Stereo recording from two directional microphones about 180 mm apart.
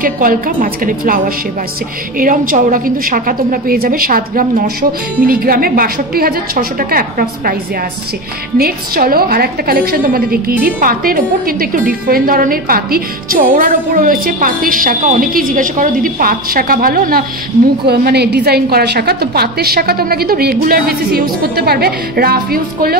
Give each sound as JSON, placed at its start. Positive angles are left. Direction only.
{"t": 0.0, "sound": "a woman's voice", "side_deg": -50}
{"t": 8.5, "sound": "a woman's voice", "side_deg": -55}